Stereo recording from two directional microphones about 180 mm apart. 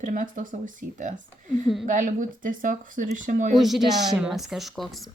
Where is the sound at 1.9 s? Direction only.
45° right (ahead or behind).